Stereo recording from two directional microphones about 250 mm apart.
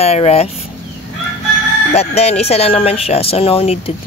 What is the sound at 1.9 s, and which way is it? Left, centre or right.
Speech, left.